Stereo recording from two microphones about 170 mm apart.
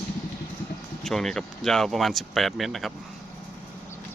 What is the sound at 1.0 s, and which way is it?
Speech, 5° left (ahead or behind).